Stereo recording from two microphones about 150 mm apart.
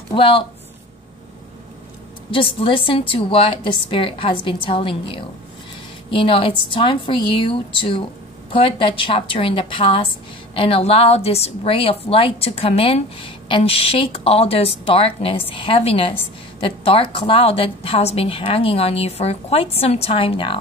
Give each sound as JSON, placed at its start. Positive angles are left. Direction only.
{"t": 0.1, "sound": "speech", "side_deg": 35}
{"t": 2.3, "sound": "a woman's voice", "side_deg": 35}